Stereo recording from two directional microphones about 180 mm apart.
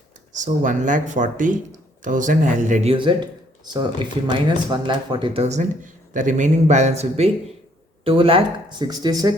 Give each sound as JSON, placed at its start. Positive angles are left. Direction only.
{"t": 0.3, "sound": "speech", "side_deg": -45}
{"t": 2.9, "sound": "speech", "side_deg": -25}
{"t": 4.3, "sound": "speech", "side_deg": -25}